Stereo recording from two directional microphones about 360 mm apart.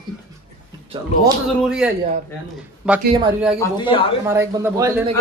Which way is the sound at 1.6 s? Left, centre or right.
Centre.